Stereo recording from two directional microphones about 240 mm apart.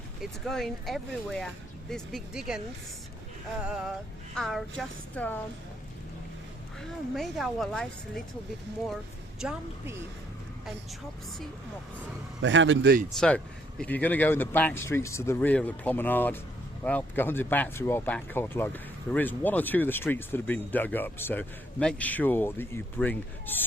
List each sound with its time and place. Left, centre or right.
0.2 s speech: centre
3.6 s speech: centre
6.7 s speech: centre
9.4 s speech: centre
12.4 s a man's voice: right
13.1 s speech: centre